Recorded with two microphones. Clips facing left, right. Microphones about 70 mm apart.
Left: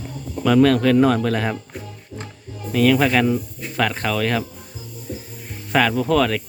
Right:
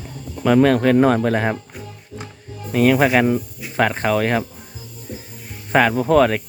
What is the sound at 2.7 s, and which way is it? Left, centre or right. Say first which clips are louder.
Speech: right 2 dB; right.